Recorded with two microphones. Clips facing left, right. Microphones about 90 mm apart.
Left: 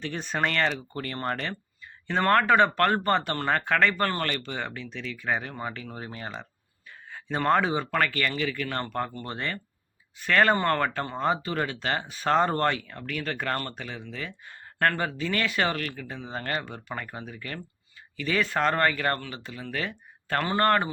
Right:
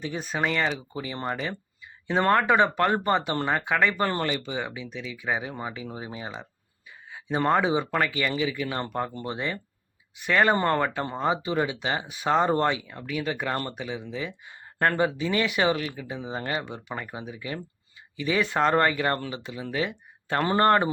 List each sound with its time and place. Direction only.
0.0 s speech: 10° right (ahead or behind)
20.4 s speech: 25° right (ahead or behind)